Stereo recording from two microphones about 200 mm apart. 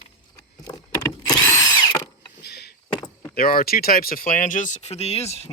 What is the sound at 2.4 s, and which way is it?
Vehicle, 55° left (ahead or behind).